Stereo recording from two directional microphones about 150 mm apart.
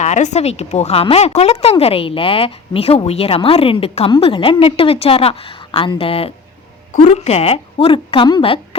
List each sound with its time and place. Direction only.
0.0 s speech: 50° left (ahead or behind); by 8.6 s 35° left (ahead or behind)